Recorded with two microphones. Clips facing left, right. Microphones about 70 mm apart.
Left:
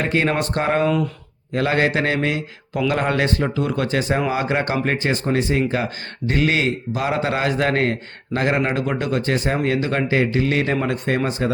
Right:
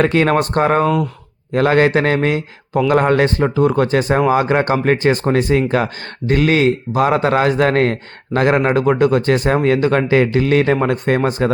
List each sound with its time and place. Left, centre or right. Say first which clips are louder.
0.0 s a man's voice: right 6 dB; right